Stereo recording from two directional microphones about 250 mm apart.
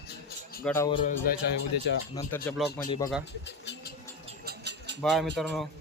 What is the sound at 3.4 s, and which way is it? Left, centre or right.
Speech, left.